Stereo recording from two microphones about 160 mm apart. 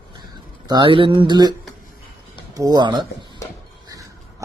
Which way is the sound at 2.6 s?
25° right (ahead or behind).